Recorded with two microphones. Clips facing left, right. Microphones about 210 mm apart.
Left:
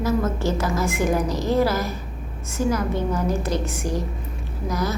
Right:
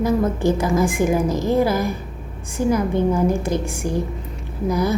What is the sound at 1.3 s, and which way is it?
Speech, 50° right (ahead or behind).